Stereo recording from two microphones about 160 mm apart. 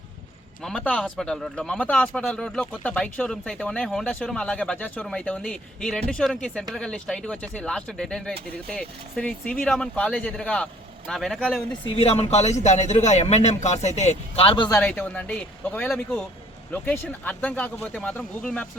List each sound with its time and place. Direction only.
0.6 s speech: 5° left (ahead or behind)
11.9 s speech: 35° left (ahead or behind)
14.7 s speech: 10° left (ahead or behind)